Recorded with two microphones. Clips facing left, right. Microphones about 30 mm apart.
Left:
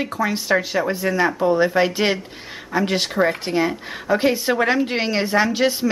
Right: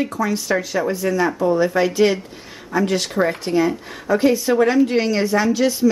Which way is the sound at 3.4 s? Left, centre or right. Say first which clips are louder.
Right 2 dB; left.